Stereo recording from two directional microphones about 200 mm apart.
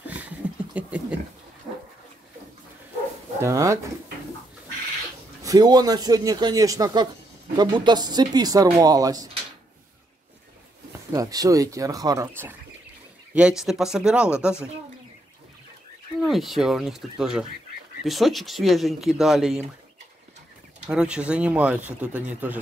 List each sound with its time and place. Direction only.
0.0 s a sound: 5° right (ahead or behind)
3.3 s speech: 15° right (ahead or behind)
5.4 s speech: 20° right (ahead or behind)
11.1 s speech: 20° right (ahead or behind)
16.3 s speech: centre (ahead or behind)
20.9 s speech: 5° right (ahead or behind)